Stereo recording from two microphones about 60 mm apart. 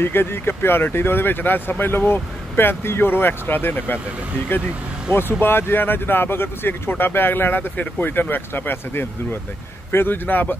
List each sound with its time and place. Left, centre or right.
0.0 s speech: left
5.1 s speech: left